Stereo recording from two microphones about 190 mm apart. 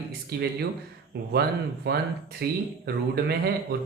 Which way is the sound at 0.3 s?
60° right (ahead or behind).